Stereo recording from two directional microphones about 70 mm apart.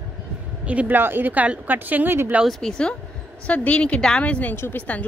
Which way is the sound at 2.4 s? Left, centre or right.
Centre.